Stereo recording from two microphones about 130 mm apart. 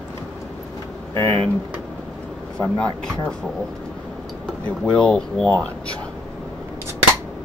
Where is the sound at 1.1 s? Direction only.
20° left (ahead or behind).